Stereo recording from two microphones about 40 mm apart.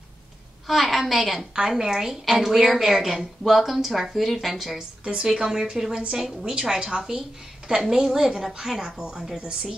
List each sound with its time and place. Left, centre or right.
0.7 s a woman's voice: centre
5.0 s a woman's voice: centre
9.4 s speech: right